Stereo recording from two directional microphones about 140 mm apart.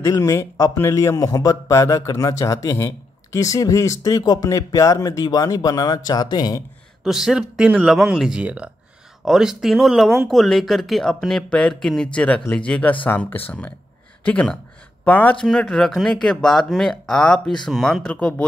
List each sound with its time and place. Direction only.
0.0 s speech: 20° left (ahead or behind)
7.1 s speech: 5° right (ahead or behind)